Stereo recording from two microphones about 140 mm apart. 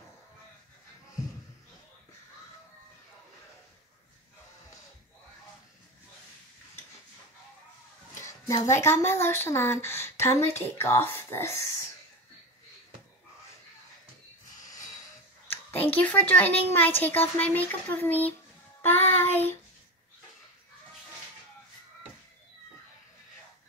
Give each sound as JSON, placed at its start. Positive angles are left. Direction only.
{"t": 8.1, "sound": "a sound", "side_deg": 20}
{"t": 8.6, "sound": "a woman's voice", "side_deg": 20}
{"t": 14.6, "sound": "snort", "side_deg": 25}
{"t": 15.5, "sound": "a child's voice", "side_deg": 10}